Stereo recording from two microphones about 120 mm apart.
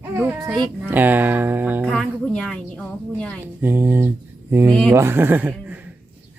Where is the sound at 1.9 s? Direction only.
5° left (ahead or behind).